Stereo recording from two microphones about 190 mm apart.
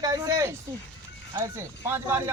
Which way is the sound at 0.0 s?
15° right (ahead or behind).